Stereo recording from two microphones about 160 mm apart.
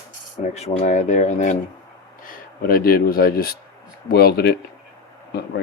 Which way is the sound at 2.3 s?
70° left (ahead or behind).